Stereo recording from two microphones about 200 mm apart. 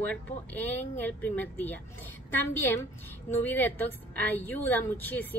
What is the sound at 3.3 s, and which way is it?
Speech, 10° left (ahead or behind).